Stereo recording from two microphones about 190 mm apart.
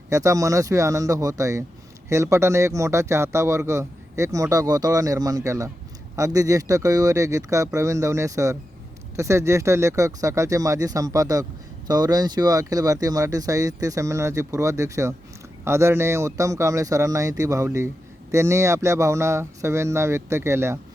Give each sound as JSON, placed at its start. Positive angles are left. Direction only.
{"t": 0.1, "sound": "speech", "side_deg": -15}